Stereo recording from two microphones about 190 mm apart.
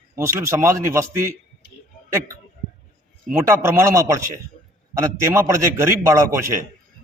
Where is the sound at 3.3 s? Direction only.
15° right (ahead or behind).